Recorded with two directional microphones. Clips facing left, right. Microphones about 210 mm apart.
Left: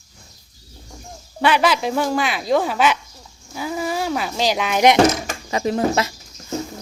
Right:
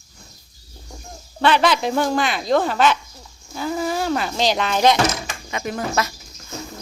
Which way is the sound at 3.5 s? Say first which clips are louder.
Right 1 dB; 5° left (ahead or behind).